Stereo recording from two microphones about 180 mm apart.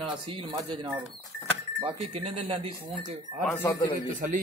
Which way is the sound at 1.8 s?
30° right (ahead or behind).